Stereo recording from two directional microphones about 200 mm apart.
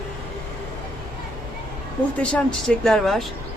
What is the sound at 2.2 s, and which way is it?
Speech, 5° left (ahead or behind).